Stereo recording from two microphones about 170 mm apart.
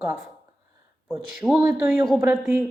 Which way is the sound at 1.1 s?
10° right (ahead or behind).